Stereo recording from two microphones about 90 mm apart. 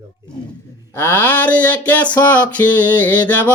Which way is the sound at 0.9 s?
20° left (ahead or behind).